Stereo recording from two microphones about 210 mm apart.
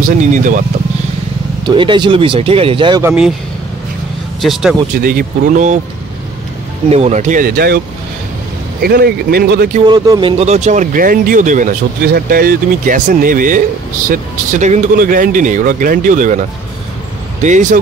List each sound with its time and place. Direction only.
0.0 s speech: 40° right (ahead or behind)
1.6 s speech: 20° right (ahead or behind)
3.0 s speech: 5° right (ahead or behind)
4.4 s speech: centre (ahead or behind)
4.9 s speech: 45° right (ahead or behind)
6.9 s speech: 30° right (ahead or behind); by 7.8 s 45° right (ahead or behind)
8.8 s speech: 45° right (ahead or behind)
9.8 s speech: 20° right (ahead or behind); by 16.3 s 40° right (ahead or behind)
17.4 s speech: 35° right (ahead or behind)